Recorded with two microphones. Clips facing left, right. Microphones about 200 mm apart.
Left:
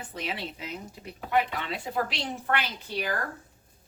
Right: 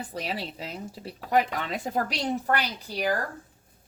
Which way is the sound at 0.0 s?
40° right (ahead or behind).